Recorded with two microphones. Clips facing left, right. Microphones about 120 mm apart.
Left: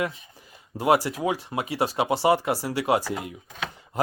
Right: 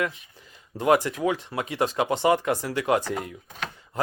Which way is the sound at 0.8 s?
10° left (ahead or behind).